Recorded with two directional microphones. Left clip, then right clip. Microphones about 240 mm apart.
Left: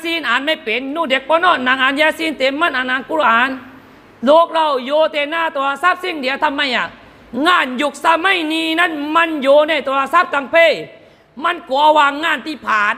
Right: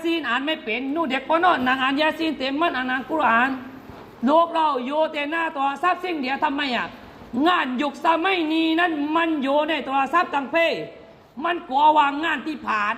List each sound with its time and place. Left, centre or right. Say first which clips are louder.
0.0 s speech: left 6 dB; left